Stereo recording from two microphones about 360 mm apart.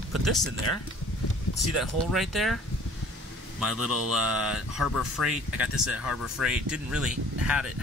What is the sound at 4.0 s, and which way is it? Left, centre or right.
Mantra, right.